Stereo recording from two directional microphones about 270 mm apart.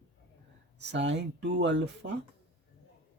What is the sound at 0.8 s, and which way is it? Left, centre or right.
Speech, right.